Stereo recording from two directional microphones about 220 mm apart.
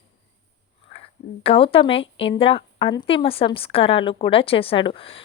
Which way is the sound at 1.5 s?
25° left (ahead or behind).